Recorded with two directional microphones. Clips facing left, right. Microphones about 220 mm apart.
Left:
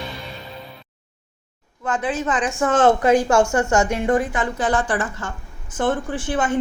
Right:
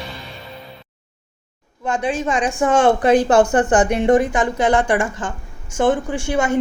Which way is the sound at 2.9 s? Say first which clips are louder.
Right 2 dB; 30° right (ahead or behind).